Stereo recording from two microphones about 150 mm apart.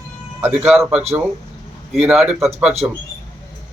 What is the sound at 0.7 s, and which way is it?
Speech, 5° right (ahead or behind).